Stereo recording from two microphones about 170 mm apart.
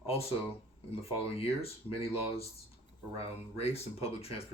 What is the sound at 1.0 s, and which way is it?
Speech, 35° left (ahead or behind).